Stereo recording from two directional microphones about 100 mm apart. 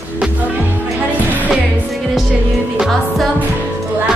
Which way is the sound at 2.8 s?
Centre (ahead or behind).